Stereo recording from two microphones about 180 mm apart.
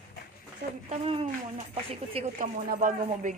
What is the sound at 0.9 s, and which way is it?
Speech, 30° right (ahead or behind).